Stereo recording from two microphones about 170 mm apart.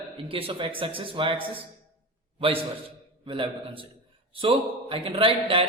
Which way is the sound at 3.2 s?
30° right (ahead or behind).